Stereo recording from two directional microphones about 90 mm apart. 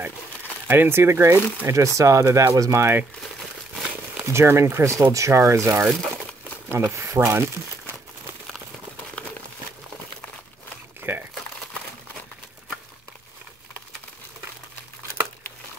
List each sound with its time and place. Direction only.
0.7 s speech: 25° right (ahead or behind)
4.2 s speech: 30° right (ahead or behind)
11.0 s crumpling: 25° right (ahead or behind)